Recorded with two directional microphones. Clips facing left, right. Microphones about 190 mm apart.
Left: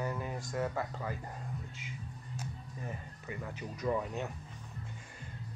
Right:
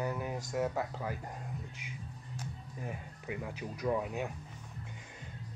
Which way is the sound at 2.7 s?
10° right (ahead or behind).